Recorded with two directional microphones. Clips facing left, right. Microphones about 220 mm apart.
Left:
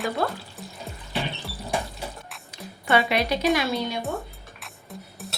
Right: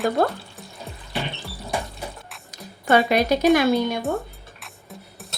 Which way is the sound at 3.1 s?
45° right (ahead or behind).